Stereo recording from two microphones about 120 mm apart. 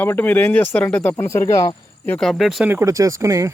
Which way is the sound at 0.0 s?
15° left (ahead or behind).